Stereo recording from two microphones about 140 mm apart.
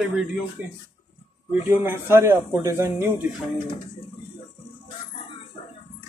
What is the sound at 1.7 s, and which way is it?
Speech, 15° right (ahead or behind).